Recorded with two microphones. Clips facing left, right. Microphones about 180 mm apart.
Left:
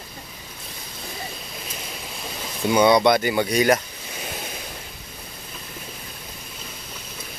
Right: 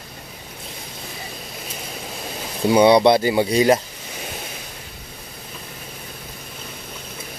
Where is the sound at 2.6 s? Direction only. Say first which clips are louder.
Right 3 dB; 30° right (ahead or behind).